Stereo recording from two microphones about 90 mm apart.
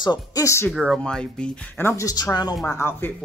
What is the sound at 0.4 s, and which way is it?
Speech, 35° left (ahead or behind).